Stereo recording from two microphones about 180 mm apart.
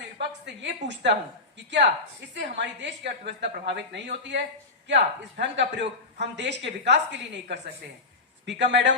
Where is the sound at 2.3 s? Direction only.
75° right (ahead or behind).